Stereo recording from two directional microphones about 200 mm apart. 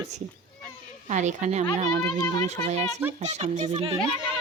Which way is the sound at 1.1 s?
35° right (ahead or behind).